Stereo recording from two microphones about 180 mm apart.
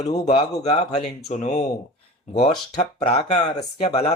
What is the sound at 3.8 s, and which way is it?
Speech, 35° left (ahead or behind).